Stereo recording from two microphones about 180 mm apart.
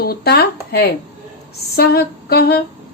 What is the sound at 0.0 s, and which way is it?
A woman's voice, 60° left (ahead or behind).